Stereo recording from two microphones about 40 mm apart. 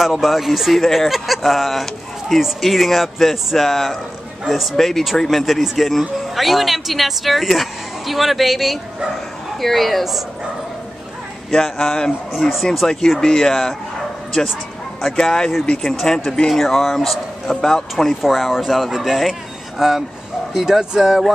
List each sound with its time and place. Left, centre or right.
0.0 s speech: centre
11.5 s speech: centre
12.4 s speech: centre
13.2 s speech: centre
15.0 s speech: centre
16.4 s speech: centre
18.2 s speech: centre